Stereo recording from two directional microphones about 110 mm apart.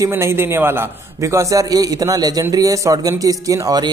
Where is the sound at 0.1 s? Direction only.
20° right (ahead or behind).